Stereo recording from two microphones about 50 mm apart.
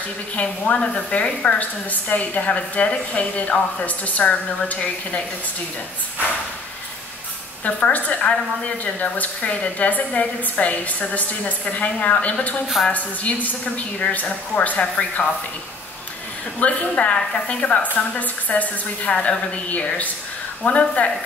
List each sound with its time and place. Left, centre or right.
0.4 s a woman's voice: left
7.6 s a woman's voice: left
16.5 s a woman's voice: left